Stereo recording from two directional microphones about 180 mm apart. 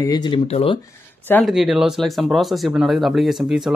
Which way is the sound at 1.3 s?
Centre (ahead or behind).